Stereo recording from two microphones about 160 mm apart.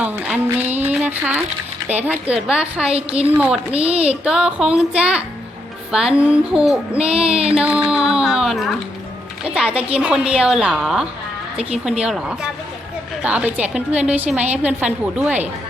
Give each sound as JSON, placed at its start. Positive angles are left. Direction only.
{"t": 0.0, "sound": "a woman's voice", "side_deg": -10}
{"t": 0.9, "sound": "a sound", "side_deg": -10}
{"t": 2.5, "sound": "a woman's voice", "side_deg": -5}
{"t": 2.9, "sound": "music", "side_deg": -40}
{"t": 3.3, "sound": "a woman's voice", "side_deg": -10}
{"t": 3.8, "sound": "music", "side_deg": -40}
{"t": 4.2, "sound": "a woman's voice", "side_deg": -5}
{"t": 7.1, "sound": "music", "side_deg": -40}
{"t": 7.6, "sound": "a woman's voice", "side_deg": -5}
{"t": 13.2, "sound": "a woman's voice", "side_deg": -10}